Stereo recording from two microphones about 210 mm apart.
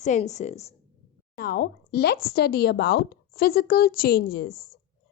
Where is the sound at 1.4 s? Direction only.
45° left (ahead or behind).